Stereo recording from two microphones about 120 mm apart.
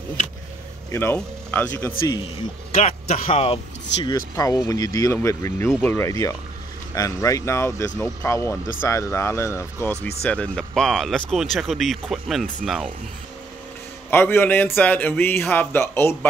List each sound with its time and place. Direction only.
1.1 s a man's voice: 15° left (ahead or behind)
2.8 s speech: 65° left (ahead or behind)
4.1 s speech: 30° left (ahead or behind)
10.2 s speech: 10° left (ahead or behind)
14.1 s a man's voice: 20° left (ahead or behind)